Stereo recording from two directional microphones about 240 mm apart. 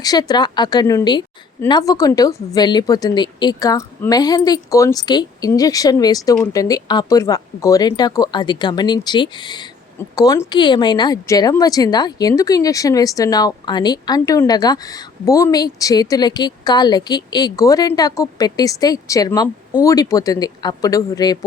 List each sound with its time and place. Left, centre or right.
0.0 s speech: centre